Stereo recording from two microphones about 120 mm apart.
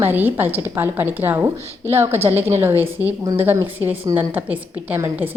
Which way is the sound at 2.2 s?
60° right (ahead or behind).